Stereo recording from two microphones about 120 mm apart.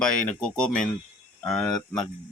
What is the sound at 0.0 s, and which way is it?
Speech, 5° left (ahead or behind).